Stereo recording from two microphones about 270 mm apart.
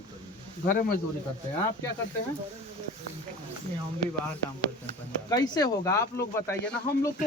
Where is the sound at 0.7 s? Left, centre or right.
Left.